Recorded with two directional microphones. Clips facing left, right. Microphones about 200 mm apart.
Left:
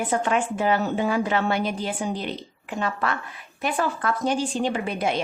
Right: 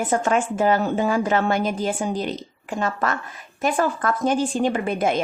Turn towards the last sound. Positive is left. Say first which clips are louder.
# right 4 dB
turn(degrees=-50)  # may be behind; listen again after turning